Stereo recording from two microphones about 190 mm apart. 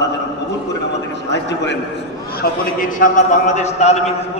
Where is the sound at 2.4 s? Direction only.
45° left (ahead or behind).